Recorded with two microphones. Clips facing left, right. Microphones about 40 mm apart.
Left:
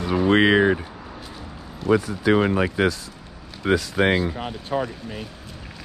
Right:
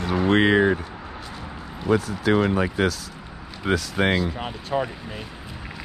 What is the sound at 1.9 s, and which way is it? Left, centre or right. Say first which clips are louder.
Speech: left 2 dB; left.